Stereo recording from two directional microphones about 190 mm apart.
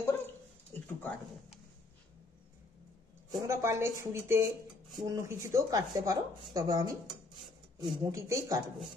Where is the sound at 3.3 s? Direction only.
15° right (ahead or behind).